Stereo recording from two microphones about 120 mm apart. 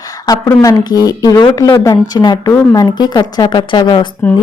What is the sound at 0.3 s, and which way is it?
A woman's voice, 35° left (ahead or behind).